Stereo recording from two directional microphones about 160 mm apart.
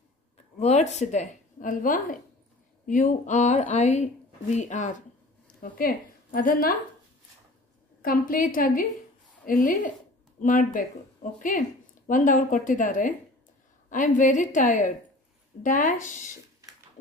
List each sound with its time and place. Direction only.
0.6 s a woman's voice: 45° left (ahead or behind)
5.6 s speech: 65° left (ahead or behind)
8.0 s a woman's voice: 60° left (ahead or behind)